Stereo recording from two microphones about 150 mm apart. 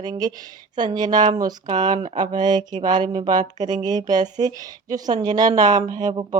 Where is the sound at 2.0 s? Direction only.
50° right (ahead or behind).